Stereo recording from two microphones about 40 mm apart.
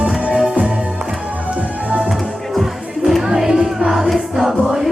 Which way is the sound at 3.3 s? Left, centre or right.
Centre.